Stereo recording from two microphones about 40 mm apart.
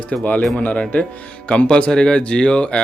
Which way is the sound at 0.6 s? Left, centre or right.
Left.